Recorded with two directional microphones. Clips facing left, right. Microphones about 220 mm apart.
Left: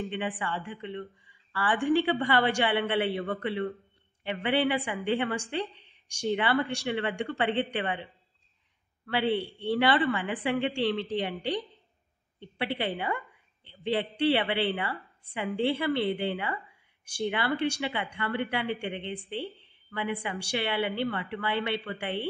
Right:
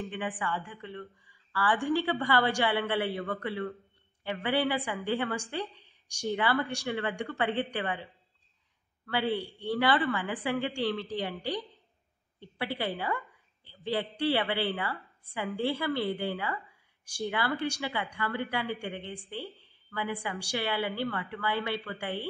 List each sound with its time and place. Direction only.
0.0 s a woman's voice: 20° left (ahead or behind)